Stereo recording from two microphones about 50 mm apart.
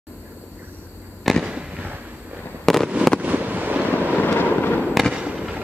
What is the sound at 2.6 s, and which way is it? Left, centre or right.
Fireworks, centre.